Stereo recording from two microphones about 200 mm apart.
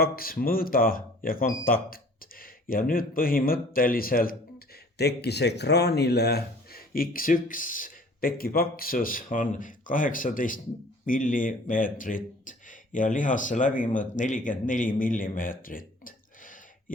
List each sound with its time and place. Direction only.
0.0 s speech: 45° left (ahead or behind)